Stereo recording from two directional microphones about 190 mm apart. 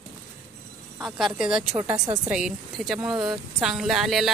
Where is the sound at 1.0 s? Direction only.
Centre (ahead or behind).